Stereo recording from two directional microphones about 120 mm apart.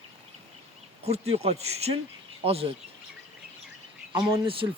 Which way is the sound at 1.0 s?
60° right (ahead or behind).